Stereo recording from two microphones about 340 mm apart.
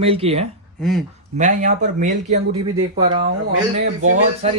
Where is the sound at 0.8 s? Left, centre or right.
Centre.